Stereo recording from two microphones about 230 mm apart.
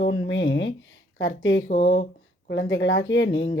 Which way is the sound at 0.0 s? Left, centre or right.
Left.